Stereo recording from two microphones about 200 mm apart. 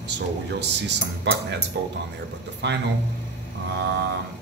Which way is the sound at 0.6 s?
60° right (ahead or behind).